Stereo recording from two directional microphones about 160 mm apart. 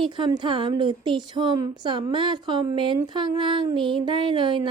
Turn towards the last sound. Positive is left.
turn(degrees=-30)  # may be behind; listen again after turning